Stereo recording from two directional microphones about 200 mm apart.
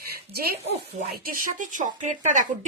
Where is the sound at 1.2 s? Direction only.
40° right (ahead or behind).